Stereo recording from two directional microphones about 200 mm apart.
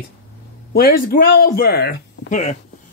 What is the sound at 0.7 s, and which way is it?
Speech, 45° left (ahead or behind).